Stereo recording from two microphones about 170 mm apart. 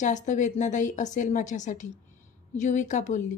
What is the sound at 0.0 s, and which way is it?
A woman's voice, 45° left (ahead or behind).